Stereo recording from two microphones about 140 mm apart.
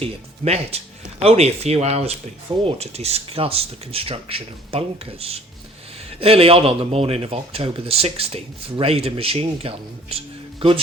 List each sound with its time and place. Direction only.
0.0 s speech: 45° right (ahead or behind)